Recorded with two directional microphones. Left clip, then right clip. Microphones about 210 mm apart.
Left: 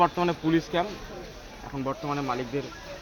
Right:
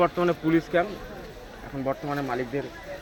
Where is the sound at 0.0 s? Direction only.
25° left (ahead or behind).